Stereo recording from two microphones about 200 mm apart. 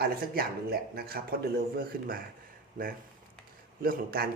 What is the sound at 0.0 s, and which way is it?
A man's voice, 50° right (ahead or behind).